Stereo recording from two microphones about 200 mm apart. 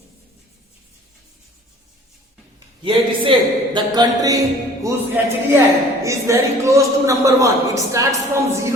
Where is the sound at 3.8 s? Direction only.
20° right (ahead or behind).